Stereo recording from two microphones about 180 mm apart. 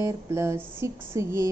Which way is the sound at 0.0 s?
15° right (ahead or behind).